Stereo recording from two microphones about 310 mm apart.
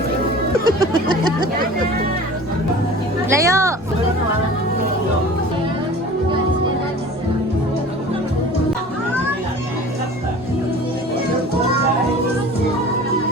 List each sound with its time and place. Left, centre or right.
3.2 s speech: centre